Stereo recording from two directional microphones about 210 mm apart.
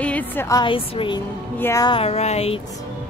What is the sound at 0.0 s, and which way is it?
A woman's voice, 5° left (ahead or behind).